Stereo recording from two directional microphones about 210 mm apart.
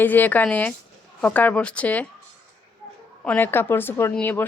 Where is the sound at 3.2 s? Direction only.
10° left (ahead or behind).